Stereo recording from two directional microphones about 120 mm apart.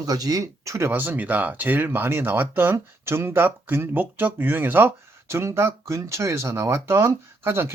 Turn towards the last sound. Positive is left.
turn(degrees=-20)  # may be behind; listen again after turning